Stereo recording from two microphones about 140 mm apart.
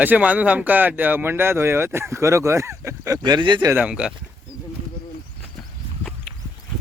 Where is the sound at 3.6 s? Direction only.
10° right (ahead or behind).